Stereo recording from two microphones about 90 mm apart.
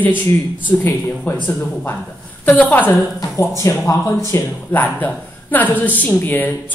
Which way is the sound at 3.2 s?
35° left (ahead or behind).